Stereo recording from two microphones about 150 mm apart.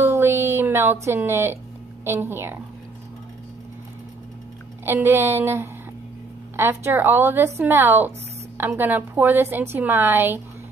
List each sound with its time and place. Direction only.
0.0 s a sound: 15° right (ahead or behind)
2.0 s a woman's voice: 15° right (ahead or behind)
4.8 s a woman's voice: 15° right (ahead or behind)